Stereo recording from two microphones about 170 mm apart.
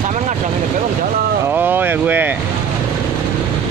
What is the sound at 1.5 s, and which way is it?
Speech, 10° right (ahead or behind).